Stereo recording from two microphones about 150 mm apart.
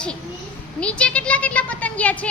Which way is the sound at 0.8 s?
5° left (ahead or behind).